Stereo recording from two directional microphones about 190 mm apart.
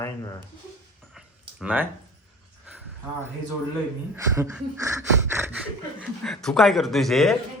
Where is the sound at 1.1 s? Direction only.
5° right (ahead or behind).